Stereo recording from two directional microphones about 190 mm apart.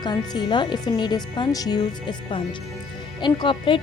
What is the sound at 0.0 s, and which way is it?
A woman's voice, 25° left (ahead or behind).